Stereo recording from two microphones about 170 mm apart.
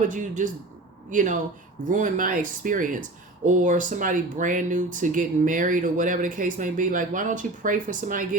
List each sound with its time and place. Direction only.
0.1 s speech: 50° right (ahead or behind)